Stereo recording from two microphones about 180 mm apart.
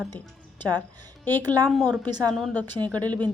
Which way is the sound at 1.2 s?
10° left (ahead or behind).